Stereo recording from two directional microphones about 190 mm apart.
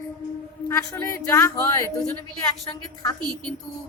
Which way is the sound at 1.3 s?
15° left (ahead or behind).